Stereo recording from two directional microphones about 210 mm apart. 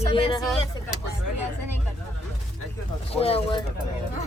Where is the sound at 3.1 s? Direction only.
25° left (ahead or behind).